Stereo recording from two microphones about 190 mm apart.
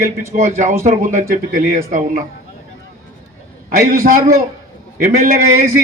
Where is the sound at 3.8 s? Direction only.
50° right (ahead or behind).